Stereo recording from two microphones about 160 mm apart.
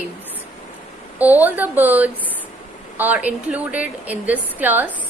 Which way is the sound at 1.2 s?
10° right (ahead or behind).